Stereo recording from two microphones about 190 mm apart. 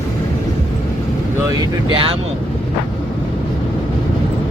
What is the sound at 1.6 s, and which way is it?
Speech, 25° right (ahead or behind).